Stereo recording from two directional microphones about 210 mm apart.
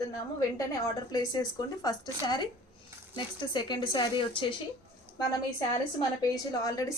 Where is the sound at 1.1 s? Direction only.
20° left (ahead or behind).